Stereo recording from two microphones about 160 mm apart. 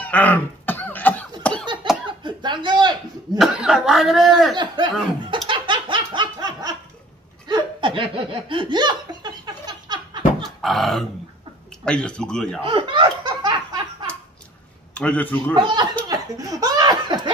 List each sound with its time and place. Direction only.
0.0 s cough: 10° left (ahead or behind)
2.2 s chuckle: 30° right (ahead or behind)
3.3 s speech: centre (ahead or behind)
4.6 s speech: 30° right (ahead or behind)
5.5 s laughter: 30° right (ahead or behind)
10.4 s dog: centre (ahead or behind)
11.8 s speech: 5° left (ahead or behind)
12.6 s laughter: 30° right (ahead or behind)
15.0 s a man's voice: 10° left (ahead or behind)
15.5 s speech: 30° right (ahead or behind)
16.1 s laughter: 20° right (ahead or behind)